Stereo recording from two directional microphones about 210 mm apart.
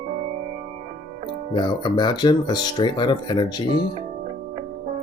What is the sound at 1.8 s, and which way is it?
Speech, 20° left (ahead or behind).